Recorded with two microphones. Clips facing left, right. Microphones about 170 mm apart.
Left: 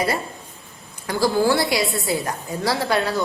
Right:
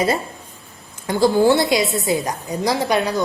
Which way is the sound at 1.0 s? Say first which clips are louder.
Right 4 dB; 20° right (ahead or behind).